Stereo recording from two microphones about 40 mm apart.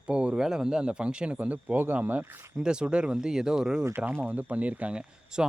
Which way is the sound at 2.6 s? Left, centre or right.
Right.